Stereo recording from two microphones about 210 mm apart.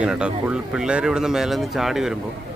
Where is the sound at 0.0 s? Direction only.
5° right (ahead or behind).